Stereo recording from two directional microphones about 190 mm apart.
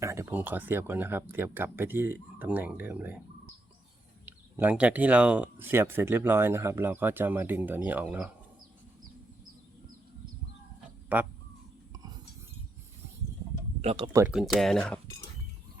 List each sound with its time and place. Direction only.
0.0 s speech: 15° right (ahead or behind)
4.3 s speech: 10° right (ahead or behind)
11.1 s speech: 10° right (ahead or behind)
13.8 s speech: 30° right (ahead or behind)
14.1 s speech: 15° right (ahead or behind)
14.3 s speech: centre (ahead or behind)